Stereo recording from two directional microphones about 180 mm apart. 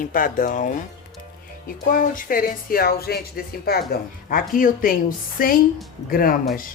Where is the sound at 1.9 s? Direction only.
50° left (ahead or behind).